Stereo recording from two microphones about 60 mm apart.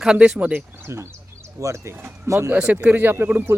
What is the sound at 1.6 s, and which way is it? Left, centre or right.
Speech, right.